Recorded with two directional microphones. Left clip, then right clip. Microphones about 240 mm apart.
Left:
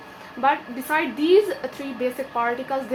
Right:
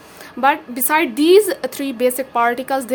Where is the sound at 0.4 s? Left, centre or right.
Right.